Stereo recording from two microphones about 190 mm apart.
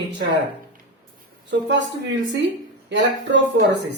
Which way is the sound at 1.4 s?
70° right (ahead or behind).